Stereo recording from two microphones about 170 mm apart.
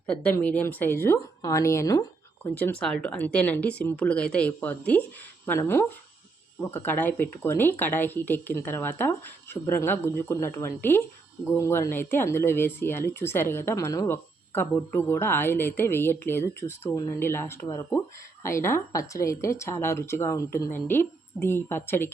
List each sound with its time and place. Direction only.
0.1 s speech: 10° left (ahead or behind)